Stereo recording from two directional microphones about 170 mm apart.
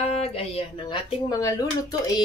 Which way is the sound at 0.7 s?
30° left (ahead or behind).